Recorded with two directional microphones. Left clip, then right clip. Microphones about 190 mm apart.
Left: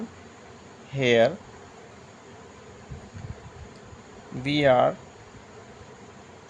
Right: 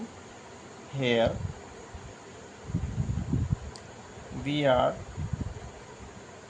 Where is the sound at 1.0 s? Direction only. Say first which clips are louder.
Left 6 dB; 65° left (ahead or behind).